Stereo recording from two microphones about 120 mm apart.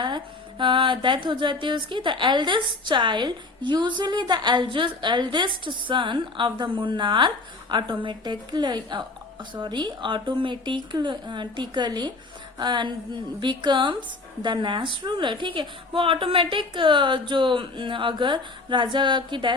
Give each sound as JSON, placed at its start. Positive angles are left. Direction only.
{"t": 0.6, "sound": "a woman's voice", "side_deg": -40}